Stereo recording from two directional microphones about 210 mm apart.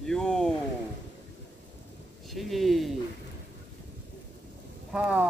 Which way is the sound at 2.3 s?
Centre (ahead or behind).